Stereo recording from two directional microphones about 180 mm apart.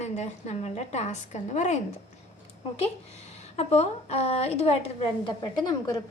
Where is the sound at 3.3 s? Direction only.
35° left (ahead or behind).